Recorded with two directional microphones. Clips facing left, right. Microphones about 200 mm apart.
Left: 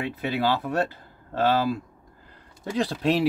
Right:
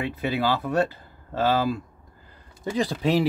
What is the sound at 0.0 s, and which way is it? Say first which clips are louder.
Speech: even; centre (ahead or behind).